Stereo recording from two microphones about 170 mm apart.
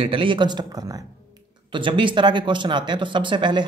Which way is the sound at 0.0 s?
30° right (ahead or behind).